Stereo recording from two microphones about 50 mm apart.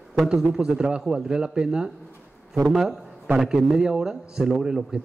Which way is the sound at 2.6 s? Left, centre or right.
Centre.